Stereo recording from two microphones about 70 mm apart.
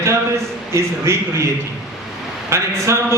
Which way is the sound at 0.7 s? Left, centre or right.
Right.